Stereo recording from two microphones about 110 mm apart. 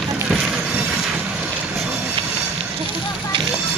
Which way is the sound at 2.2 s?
55° right (ahead or behind).